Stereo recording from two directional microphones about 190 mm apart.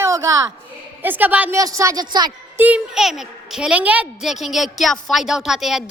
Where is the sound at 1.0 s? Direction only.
10° right (ahead or behind).